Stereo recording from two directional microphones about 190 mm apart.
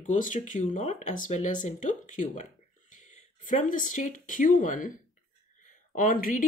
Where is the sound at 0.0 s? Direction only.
40° left (ahead or behind).